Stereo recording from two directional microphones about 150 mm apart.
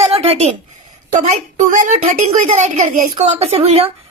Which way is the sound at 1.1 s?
55° right (ahead or behind).